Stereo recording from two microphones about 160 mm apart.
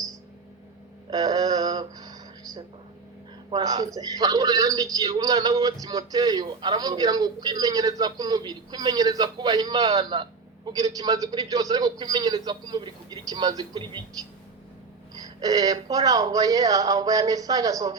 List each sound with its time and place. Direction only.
1.1 s a sound: 25° right (ahead or behind)
3.5 s a man's voice: 25° right (ahead or behind)
15.2 s a man's voice: 25° right (ahead or behind)